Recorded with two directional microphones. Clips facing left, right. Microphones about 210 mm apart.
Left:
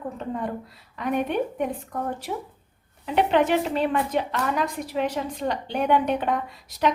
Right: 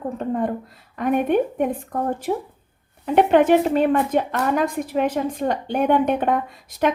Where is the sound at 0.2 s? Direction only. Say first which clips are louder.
Right 7 dB; 50° right (ahead or behind).